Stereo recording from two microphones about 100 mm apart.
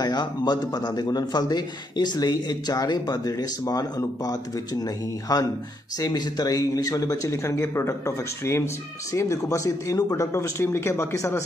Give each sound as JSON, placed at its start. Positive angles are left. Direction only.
{"t": 0.0, "sound": "a man's voice", "side_deg": 45}